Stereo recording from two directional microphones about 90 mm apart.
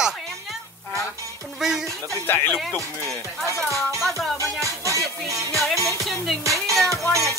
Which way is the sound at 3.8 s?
Centre (ahead or behind).